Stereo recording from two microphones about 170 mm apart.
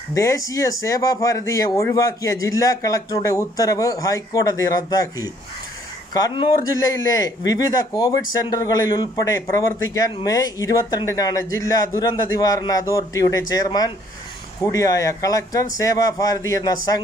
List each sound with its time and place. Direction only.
0.1 s speech: 20° left (ahead or behind)